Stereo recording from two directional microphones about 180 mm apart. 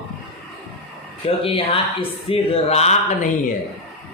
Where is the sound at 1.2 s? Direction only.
30° left (ahead or behind).